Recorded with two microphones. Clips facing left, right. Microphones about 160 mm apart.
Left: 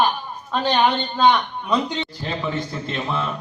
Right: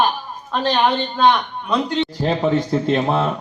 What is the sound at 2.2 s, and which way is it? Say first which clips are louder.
Speech: right 8 dB; 50° right (ahead or behind).